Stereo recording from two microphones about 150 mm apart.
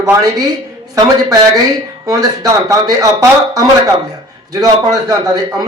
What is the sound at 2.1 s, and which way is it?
A man's voice, 25° right (ahead or behind).